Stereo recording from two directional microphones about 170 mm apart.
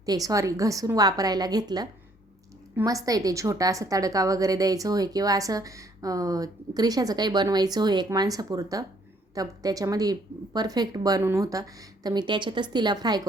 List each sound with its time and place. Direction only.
0.0 s a woman's voice: 20° right (ahead or behind)